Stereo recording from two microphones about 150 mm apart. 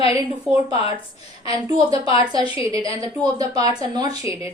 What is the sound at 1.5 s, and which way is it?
A woman's voice, 25° right (ahead or behind).